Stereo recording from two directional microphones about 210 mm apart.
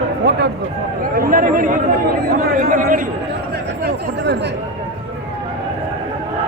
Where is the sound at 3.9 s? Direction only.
55° right (ahead or behind).